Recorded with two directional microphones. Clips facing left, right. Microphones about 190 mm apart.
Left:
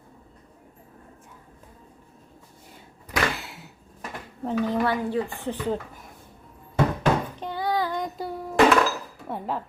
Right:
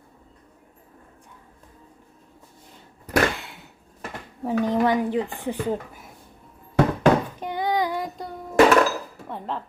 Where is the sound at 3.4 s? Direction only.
Centre (ahead or behind).